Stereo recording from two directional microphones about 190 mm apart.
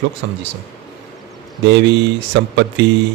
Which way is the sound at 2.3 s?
65° right (ahead or behind).